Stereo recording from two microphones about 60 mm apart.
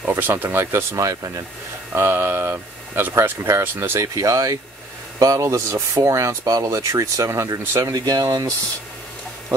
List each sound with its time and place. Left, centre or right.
0.2 s speech: right
0.9 s speech: right
1.9 s speech: right
4.0 s speech: right